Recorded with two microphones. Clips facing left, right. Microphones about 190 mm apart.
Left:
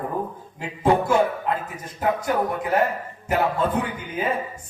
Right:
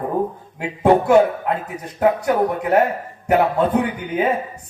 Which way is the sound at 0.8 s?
65° right (ahead or behind).